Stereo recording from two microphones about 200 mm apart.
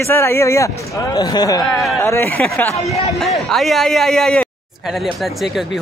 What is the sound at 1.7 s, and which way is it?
Speech, centre (ahead or behind).